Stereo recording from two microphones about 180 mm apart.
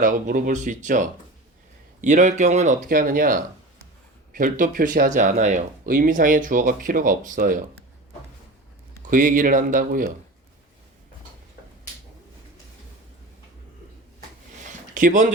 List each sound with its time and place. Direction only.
0.0 s speech: 50° right (ahead or behind)
9.0 s speech: 50° right (ahead or behind)
14.9 s speech: 45° right (ahead or behind)